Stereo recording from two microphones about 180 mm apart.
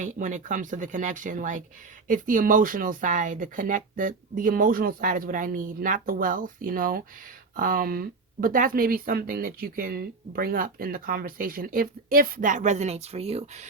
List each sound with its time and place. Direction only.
0.0 s speech: 45° right (ahead or behind)